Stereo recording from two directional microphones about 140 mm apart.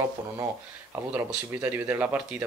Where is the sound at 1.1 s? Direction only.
15° right (ahead or behind).